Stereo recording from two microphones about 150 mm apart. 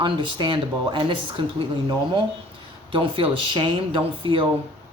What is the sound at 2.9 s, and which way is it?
Speech, 35° right (ahead or behind).